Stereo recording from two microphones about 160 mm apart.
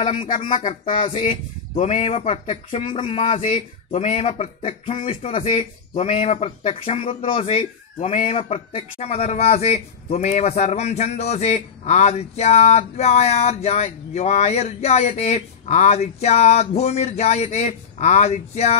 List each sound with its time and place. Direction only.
0.0 s speech: 35° left (ahead or behind)
0.4 s speech: 55° left (ahead or behind)
0.7 s speech: 35° left (ahead or behind)
3.2 s speech: 40° left (ahead or behind)